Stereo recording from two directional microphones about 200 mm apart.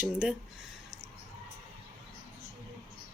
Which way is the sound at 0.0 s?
5° right (ahead or behind).